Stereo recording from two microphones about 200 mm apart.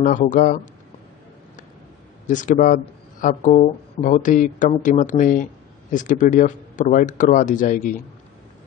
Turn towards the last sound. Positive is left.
turn(degrees=40)  # may be behind; listen again after turning